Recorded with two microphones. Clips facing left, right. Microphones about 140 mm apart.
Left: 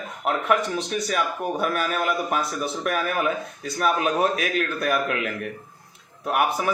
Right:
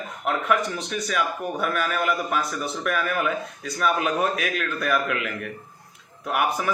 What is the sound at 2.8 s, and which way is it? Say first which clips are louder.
A man's voice: even; 35° left (ahead or behind).